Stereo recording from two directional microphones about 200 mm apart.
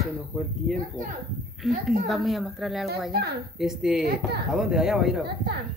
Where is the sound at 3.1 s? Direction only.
55° right (ahead or behind).